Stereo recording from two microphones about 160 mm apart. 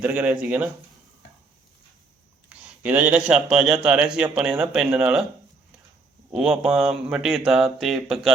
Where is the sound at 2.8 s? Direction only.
10° right (ahead or behind).